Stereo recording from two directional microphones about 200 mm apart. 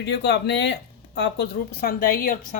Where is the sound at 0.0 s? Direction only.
60° left (ahead or behind).